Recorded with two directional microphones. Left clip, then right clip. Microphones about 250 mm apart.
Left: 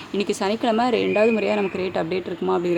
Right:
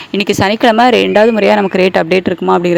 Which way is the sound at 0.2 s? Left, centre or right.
Right.